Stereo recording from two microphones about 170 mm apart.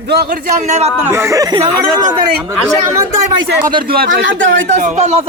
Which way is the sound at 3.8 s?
65° right (ahead or behind).